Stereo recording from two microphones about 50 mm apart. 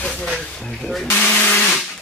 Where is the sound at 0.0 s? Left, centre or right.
Left.